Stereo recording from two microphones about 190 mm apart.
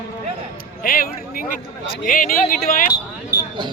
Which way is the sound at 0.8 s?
50° left (ahead or behind).